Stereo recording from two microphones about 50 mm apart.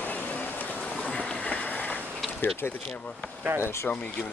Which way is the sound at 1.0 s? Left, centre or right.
Centre.